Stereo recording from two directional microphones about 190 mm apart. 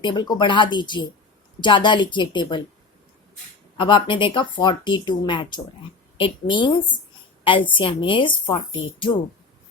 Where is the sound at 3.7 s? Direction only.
25° left (ahead or behind).